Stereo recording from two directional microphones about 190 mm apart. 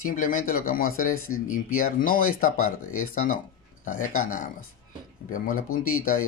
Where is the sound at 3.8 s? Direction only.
45° left (ahead or behind).